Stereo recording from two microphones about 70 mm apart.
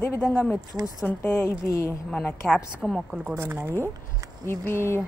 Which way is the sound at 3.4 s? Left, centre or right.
Right.